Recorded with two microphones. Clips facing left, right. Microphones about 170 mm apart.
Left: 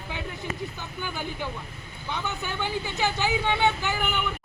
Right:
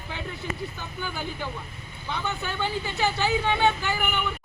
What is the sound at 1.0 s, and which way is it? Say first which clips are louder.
Speech: even; 15° left (ahead or behind).